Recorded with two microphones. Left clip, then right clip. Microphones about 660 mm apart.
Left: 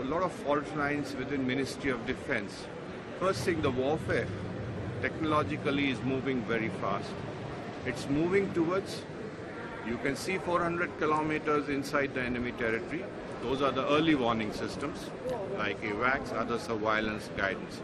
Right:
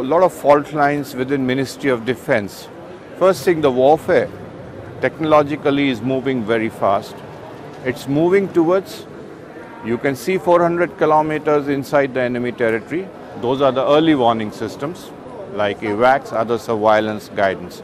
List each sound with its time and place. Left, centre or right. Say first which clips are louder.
0.1 s speech: right 18 dB; right
9.8 s speech: right 14 dB; right